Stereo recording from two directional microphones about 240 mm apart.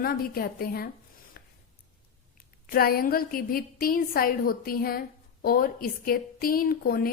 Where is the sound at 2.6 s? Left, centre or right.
Left.